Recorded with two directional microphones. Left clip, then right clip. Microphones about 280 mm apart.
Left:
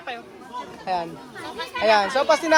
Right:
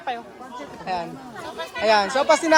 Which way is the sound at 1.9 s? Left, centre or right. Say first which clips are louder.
Even; centre.